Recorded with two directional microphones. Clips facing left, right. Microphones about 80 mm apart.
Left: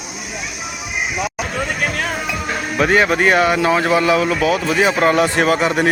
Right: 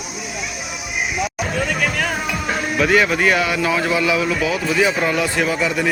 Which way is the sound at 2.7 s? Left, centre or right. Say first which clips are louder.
Left 2 dB; left.